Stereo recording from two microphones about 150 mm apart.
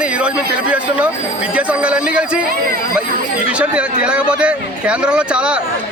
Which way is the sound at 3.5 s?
10° right (ahead or behind).